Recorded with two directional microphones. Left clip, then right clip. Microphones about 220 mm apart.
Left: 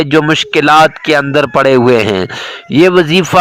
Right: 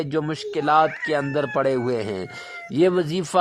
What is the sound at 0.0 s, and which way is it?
Speech, 25° left (ahead or behind).